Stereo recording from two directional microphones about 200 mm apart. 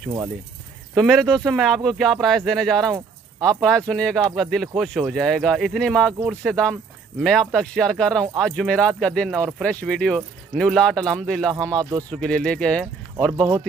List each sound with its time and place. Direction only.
0.9 s speech: centre (ahead or behind)
13.3 s speech: 15° right (ahead or behind)